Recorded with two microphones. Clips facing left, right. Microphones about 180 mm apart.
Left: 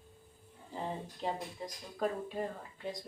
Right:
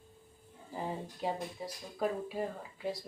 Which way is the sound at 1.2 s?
10° right (ahead or behind).